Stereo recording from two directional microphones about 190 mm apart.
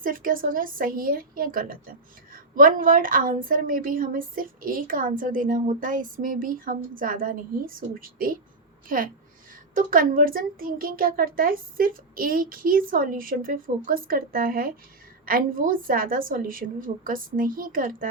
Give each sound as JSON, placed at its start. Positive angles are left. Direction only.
{"t": 0.0, "sound": "a woman's voice", "side_deg": -45}